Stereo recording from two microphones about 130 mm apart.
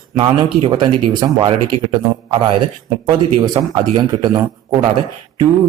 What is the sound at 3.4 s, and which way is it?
Speech, 35° right (ahead or behind).